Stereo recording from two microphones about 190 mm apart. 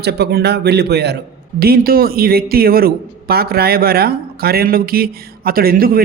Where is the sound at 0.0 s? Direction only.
60° right (ahead or behind).